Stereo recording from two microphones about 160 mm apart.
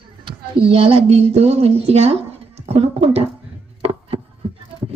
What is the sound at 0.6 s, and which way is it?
Speech, 35° right (ahead or behind).